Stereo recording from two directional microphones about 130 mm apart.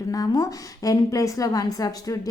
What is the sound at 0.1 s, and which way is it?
A woman's voice, 25° left (ahead or behind).